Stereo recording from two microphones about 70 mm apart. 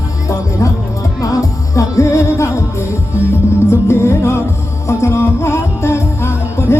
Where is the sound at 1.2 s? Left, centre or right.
Left.